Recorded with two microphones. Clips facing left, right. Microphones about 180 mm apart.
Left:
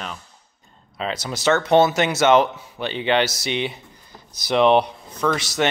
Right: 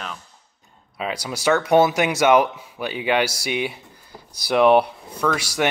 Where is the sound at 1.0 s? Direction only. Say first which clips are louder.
Left 1 dB; 10° right (ahead or behind).